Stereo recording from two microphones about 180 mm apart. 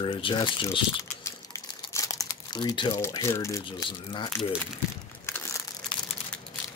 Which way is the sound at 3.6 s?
25° left (ahead or behind).